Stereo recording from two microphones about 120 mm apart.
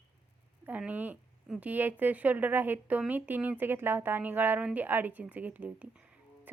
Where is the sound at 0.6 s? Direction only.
15° right (ahead or behind).